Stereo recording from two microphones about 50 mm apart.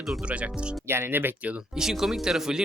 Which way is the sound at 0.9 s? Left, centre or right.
Right.